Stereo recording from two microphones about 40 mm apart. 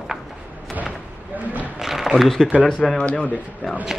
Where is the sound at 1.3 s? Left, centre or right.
Right.